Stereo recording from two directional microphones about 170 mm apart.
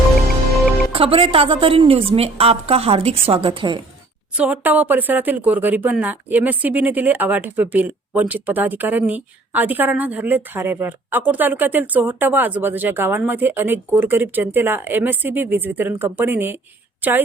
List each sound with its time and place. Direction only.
0.9 s a woman's voice: 35° right (ahead or behind)
4.4 s a woman's voice: 10° right (ahead or behind)